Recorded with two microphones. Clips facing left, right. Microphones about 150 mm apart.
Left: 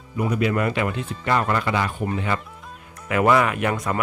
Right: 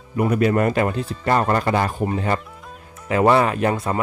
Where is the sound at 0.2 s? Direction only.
50° right (ahead or behind).